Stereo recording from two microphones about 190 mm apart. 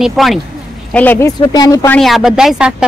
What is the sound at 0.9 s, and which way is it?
Speech, 10° left (ahead or behind).